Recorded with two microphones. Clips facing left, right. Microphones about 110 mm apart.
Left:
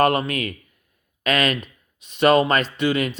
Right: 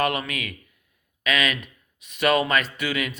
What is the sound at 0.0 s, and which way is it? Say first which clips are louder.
A man's voice: left 6 dB; 40° left (ahead or behind).